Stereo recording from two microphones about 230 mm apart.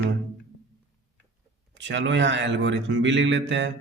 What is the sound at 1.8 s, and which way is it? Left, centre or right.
A man's voice, right.